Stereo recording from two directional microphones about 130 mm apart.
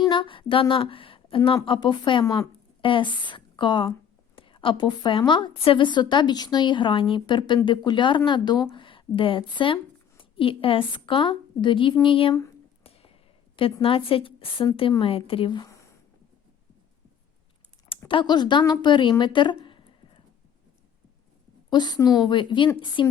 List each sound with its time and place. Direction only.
0.1 s a woman's voice: 40° left (ahead or behind)
2.2 s speech: 25° left (ahead or behind)
2.8 s a woman's voice: 40° left (ahead or behind)
12.8 s a sound: 50° left (ahead or behind)
13.8 s a woman's voice: 45° left (ahead or behind); by 15.9 s 25° left (ahead or behind)
18.1 s a woman's voice: 35° left (ahead or behind)
19.6 s a sound: 40° left (ahead or behind)
21.7 s a woman's voice: 35° left (ahead or behind)